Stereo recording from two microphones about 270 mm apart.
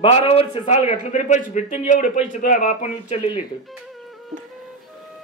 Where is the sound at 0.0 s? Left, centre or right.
Left.